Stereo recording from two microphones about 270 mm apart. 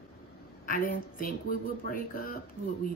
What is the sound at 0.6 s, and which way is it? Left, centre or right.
Speech, left.